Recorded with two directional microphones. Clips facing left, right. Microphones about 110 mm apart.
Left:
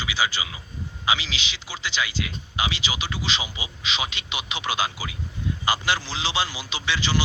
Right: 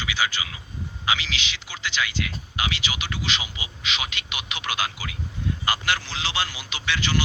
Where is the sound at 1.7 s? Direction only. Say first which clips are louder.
Even; 25° left (ahead or behind).